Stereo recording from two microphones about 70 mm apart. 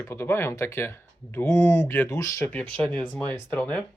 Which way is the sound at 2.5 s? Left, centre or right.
Centre.